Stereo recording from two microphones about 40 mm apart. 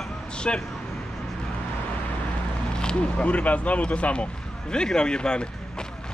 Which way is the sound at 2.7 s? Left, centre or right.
Left.